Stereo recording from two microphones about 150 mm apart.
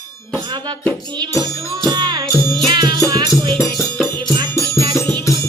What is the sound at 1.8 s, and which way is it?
Music, 30° right (ahead or behind).